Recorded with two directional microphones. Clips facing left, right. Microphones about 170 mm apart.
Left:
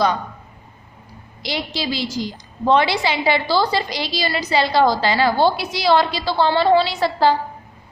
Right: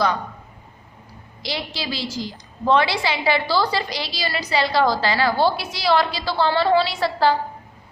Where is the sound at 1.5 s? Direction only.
20° left (ahead or behind).